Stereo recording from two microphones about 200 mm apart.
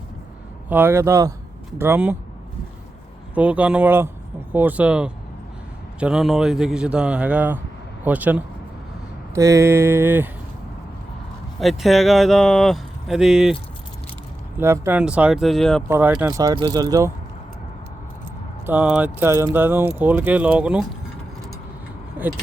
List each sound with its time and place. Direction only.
0.7 s speech: 10° right (ahead or behind)
3.3 s speech: 5° right (ahead or behind)
11.6 s speech: centre (ahead or behind)
14.6 s speech: 10° right (ahead or behind)
15.9 s speech: 10° right (ahead or behind)
16.4 s speech: 20° right (ahead or behind)
18.6 s speech: 5° right (ahead or behind)